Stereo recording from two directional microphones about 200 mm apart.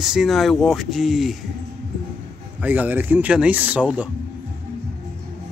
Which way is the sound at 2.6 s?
10° right (ahead or behind).